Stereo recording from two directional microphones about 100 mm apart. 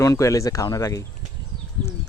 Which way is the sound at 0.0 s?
30° left (ahead or behind).